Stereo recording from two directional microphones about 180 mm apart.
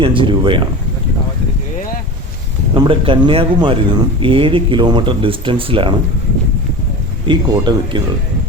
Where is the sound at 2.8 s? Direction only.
30° right (ahead or behind).